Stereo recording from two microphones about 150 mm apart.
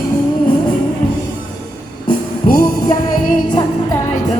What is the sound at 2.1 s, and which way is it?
Music, 70° left (ahead or behind).